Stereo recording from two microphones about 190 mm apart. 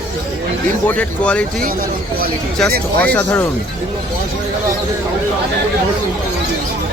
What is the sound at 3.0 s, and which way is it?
Speech, 10° left (ahead or behind).